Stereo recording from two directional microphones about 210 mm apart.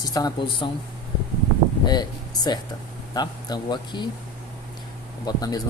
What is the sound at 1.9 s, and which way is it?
Speech, 20° left (ahead or behind).